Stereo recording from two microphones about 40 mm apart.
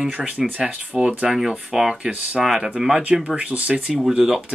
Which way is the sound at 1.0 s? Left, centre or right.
Right.